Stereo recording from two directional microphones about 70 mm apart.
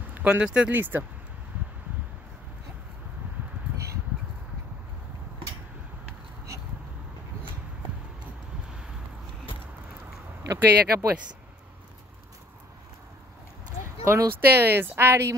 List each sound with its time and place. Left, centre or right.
0.1 s a sound: right
0.5 s speech: centre
0.7 s speech: right
10.4 s speech: right
14.0 s speech: right